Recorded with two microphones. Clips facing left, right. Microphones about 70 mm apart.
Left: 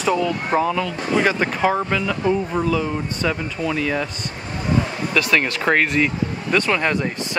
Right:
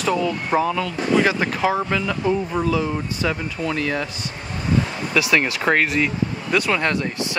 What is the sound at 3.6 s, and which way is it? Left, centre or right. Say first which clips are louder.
Speech: left 1 dB; centre.